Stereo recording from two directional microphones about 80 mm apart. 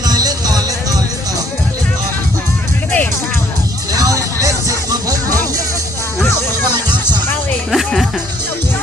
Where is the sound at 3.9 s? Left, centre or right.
Right.